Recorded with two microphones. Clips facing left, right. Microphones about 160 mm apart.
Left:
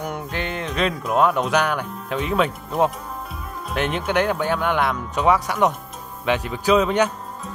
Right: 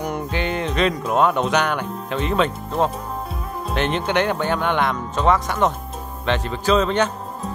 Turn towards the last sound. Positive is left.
turn(degrees=10)  # may be behind; listen again after turning